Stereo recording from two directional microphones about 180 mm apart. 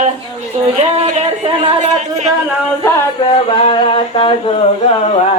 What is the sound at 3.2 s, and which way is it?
Singing, 30° left (ahead or behind).